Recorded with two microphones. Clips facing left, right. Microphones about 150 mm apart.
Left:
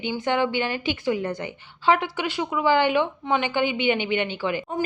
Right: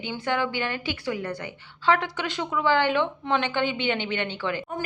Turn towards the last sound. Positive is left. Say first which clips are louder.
# left 4 dB
turn(degrees=15)  # may be behind; listen again after turning